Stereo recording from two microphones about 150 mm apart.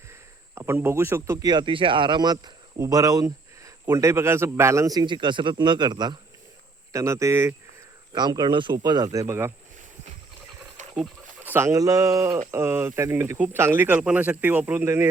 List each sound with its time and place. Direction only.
0.1 s a man's voice: 15° right (ahead or behind)
9.1 s speech: 15° right (ahead or behind)
11.5 s a man's voice: 20° right (ahead or behind)